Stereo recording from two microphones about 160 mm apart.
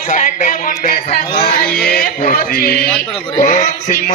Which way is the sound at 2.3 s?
65° left (ahead or behind).